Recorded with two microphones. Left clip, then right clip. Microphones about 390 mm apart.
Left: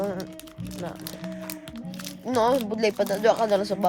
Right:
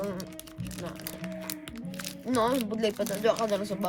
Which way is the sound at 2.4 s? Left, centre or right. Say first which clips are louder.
Left 5 dB; left.